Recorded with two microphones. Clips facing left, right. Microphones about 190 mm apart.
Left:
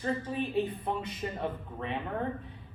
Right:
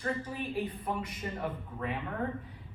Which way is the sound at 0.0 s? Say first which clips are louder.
Left 3 dB; 25° left (ahead or behind).